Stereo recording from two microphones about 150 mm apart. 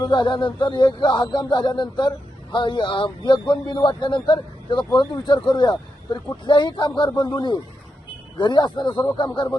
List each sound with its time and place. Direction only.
0.0 s a man's voice: 30° left (ahead or behind)